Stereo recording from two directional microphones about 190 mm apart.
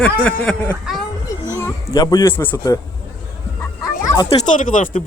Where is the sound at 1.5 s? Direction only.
15° left (ahead or behind).